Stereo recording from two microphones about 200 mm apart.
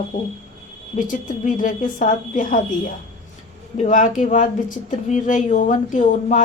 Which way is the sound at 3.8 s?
40° left (ahead or behind).